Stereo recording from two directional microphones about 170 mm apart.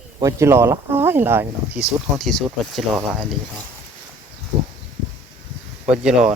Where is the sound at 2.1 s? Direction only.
Centre (ahead or behind).